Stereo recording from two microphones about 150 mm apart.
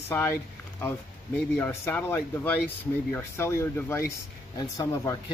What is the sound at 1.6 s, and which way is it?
Speech, 15° left (ahead or behind).